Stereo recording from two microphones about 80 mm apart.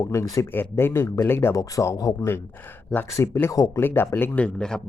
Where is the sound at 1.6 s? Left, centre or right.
Left.